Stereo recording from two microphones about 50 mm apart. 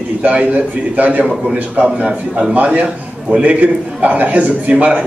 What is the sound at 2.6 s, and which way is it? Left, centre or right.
A man's voice, right.